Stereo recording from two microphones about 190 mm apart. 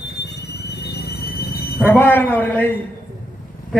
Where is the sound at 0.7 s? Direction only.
60° left (ahead or behind).